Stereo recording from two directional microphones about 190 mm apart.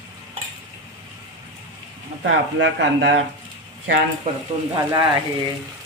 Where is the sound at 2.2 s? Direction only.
70° right (ahead or behind).